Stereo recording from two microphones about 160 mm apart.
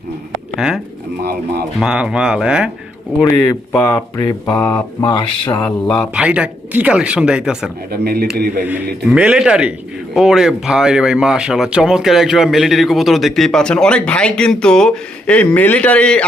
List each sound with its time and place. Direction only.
0.5 s speech: 5° right (ahead or behind)
1.2 s speech: 80° right
1.8 s speech: 5° right (ahead or behind)
3.3 s speech: 20° left (ahead or behind)
5.6 s speech: 5° left (ahead or behind)
6.1 s speech: 5° right (ahead or behind)
7.9 s speech: 75° right (ahead or behind)
9.0 s speech: 5° right (ahead or behind)